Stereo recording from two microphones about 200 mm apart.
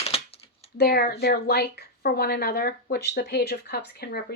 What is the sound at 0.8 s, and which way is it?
A woman's voice, 50° left (ahead or behind).